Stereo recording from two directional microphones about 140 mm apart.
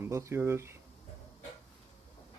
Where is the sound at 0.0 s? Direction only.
20° right (ahead or behind).